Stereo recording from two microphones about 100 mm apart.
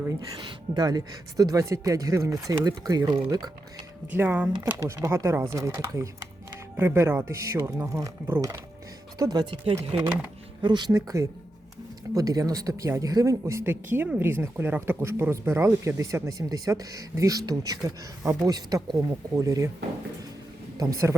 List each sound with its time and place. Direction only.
0.7 s speech: 40° right (ahead or behind)
4.1 s speech: 20° right (ahead or behind)
4.8 s speech: 30° right (ahead or behind)
9.9 s speech: 70° right (ahead or behind)
10.6 s speech: 50° right (ahead or behind)
10.9 s speech: 35° right (ahead or behind)
20.7 s speech: 35° right (ahead or behind)